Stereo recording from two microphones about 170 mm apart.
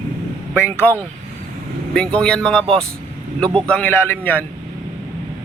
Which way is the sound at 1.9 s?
5° left (ahead or behind).